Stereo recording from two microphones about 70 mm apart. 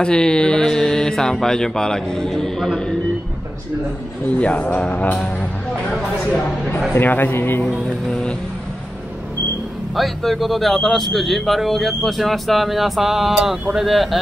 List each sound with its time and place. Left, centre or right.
0.0 s speech: centre
4.3 s a man's voice: centre
6.9 s a man's voice: left
8.1 s speech: centre
9.9 s a man's voice: centre